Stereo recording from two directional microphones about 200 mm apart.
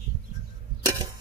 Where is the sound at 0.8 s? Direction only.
15° right (ahead or behind).